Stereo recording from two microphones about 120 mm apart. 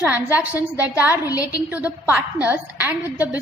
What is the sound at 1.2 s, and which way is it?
Speech, 30° left (ahead or behind).